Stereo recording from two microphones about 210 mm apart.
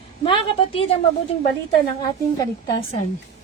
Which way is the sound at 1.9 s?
15° left (ahead or behind).